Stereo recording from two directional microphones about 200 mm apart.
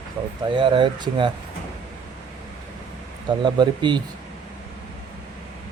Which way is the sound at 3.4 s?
20° right (ahead or behind).